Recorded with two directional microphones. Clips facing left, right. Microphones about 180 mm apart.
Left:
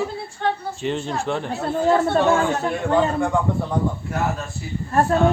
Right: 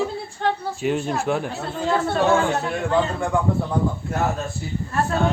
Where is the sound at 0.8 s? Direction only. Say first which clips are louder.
Right 2 dB; 10° right (ahead or behind).